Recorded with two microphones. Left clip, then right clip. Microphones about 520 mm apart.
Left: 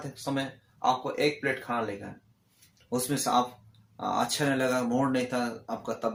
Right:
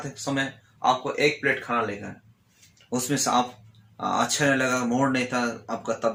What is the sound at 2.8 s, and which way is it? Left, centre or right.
Speech, left.